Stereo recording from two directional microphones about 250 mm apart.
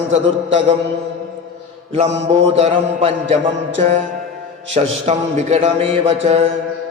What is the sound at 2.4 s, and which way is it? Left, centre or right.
Speech, right.